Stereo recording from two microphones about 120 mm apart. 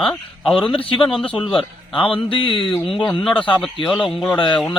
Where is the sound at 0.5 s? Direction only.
45° left (ahead or behind).